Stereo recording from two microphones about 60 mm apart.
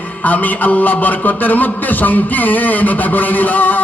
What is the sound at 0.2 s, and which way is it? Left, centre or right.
A man's voice, left.